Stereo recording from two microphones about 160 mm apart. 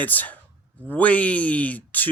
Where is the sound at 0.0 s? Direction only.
10° left (ahead or behind).